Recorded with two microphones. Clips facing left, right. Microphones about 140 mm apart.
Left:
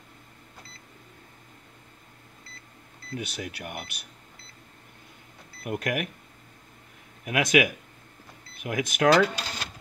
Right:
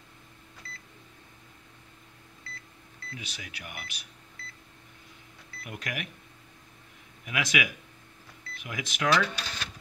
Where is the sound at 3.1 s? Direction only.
50° left (ahead or behind).